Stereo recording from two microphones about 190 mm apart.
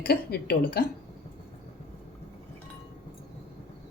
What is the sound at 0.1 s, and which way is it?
Speech, 55° left (ahead or behind).